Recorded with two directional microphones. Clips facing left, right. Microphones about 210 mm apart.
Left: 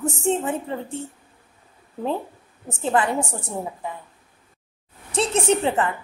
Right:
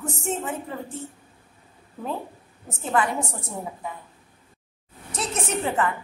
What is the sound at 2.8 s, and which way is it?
Speech, 30° left (ahead or behind).